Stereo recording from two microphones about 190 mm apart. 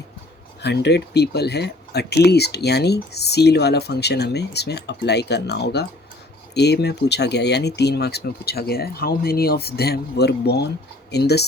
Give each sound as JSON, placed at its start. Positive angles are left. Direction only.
{"t": 0.6, "sound": "speech", "side_deg": 60}